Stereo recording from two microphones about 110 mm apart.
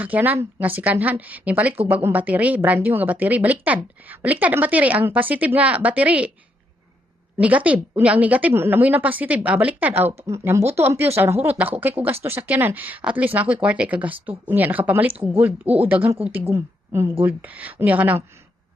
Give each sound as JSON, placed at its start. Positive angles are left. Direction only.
{"t": 0.0, "sound": "speech", "side_deg": -15}
{"t": 7.3, "sound": "a woman's voice", "side_deg": -15}